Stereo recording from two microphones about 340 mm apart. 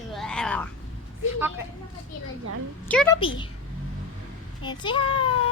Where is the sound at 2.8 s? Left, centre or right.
Centre.